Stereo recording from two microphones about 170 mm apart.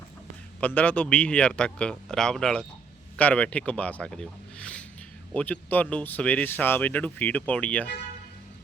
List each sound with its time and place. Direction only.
0.6 s speech: 10° left (ahead or behind)